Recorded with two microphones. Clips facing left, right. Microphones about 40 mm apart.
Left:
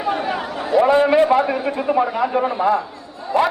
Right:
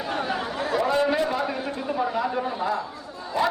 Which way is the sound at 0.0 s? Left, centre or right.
Centre.